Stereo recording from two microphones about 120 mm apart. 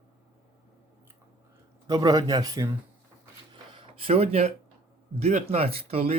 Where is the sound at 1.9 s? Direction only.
30° right (ahead or behind).